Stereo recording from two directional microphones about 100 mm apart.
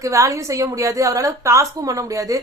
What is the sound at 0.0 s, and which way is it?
A woman's voice, 30° right (ahead or behind).